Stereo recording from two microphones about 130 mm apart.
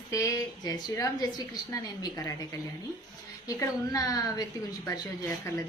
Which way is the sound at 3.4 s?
25° left (ahead or behind).